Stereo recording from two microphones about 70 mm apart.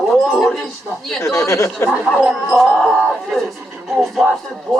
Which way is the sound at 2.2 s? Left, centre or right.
Centre.